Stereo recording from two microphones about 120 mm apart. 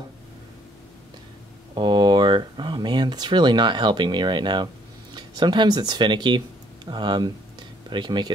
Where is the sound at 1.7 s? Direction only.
40° right (ahead or behind).